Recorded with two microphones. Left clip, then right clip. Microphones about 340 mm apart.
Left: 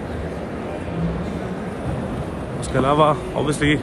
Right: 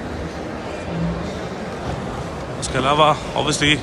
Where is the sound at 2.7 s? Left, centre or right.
Centre.